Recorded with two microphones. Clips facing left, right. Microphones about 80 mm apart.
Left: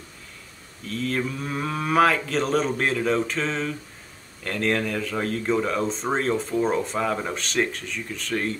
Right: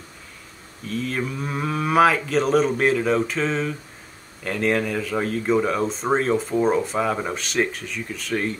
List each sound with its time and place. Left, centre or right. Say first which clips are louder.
0.8 s speech: even; centre